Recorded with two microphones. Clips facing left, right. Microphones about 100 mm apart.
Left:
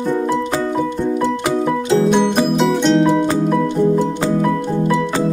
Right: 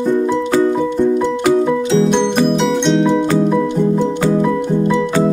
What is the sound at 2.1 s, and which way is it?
Music, 5° left (ahead or behind).